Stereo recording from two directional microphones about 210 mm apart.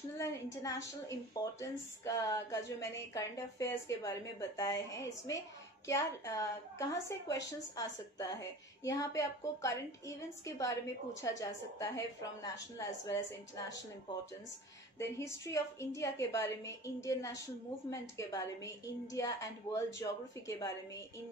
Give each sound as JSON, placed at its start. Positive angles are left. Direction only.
{"t": 0.2, "sound": "a woman's voice", "side_deg": 15}
{"t": 15.0, "sound": "a woman's voice", "side_deg": 15}